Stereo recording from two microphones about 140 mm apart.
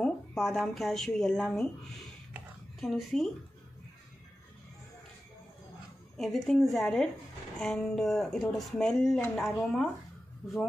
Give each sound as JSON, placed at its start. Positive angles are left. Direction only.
{"t": 0.0, "sound": "speech", "side_deg": 0}
{"t": 6.1, "sound": "speech", "side_deg": 0}